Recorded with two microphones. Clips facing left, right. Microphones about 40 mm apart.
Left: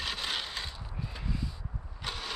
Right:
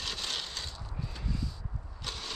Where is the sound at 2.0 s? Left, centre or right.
Centre.